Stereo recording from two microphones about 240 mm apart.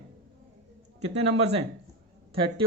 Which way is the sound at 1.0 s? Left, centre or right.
Right.